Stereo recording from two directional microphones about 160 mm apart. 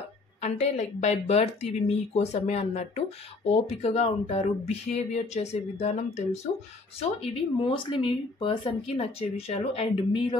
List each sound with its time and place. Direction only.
0.4 s speech: 45° left (ahead or behind)